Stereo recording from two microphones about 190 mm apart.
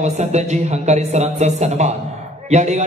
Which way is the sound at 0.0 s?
35° right (ahead or behind).